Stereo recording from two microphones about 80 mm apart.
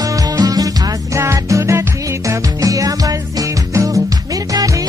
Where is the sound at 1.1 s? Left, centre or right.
Right.